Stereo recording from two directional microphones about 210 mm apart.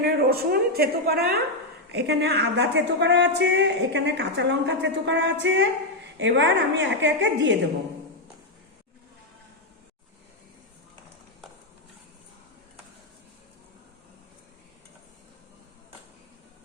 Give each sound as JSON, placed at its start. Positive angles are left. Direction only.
{"t": 0.0, "sound": "a woman's voice", "side_deg": -45}